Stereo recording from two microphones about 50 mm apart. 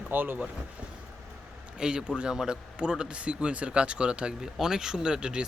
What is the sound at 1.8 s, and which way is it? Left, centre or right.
A man's voice, centre.